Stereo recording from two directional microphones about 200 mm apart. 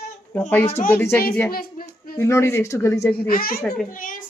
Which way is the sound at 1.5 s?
45° left (ahead or behind).